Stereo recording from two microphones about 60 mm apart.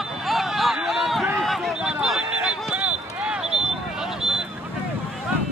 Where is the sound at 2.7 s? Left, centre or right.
Right.